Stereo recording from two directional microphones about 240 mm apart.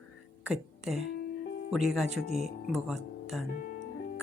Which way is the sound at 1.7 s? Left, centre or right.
Centre.